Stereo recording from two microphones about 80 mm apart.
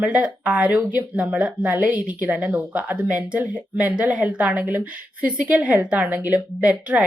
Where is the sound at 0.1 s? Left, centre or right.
Centre.